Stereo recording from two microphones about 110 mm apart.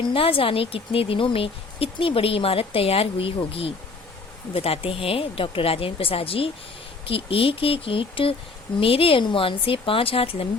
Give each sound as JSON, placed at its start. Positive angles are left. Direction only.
{"t": 0.1, "sound": "speech", "side_deg": 55}